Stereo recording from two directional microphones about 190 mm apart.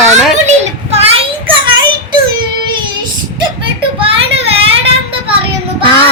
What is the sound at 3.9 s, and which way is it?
Child singing, 30° right (ahead or behind).